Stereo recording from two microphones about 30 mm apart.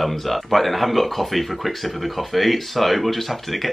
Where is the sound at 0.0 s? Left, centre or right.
Centre.